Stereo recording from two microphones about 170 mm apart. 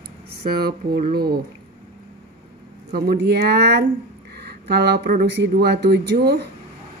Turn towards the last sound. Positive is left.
turn(degrees=-70)  # may be behind; listen again after turning